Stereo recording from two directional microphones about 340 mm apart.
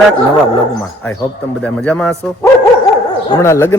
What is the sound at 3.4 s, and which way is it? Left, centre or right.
Speech, centre.